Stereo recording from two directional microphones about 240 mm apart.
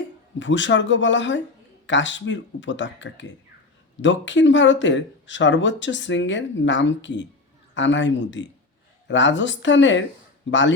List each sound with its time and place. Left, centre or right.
0.3 s speech: left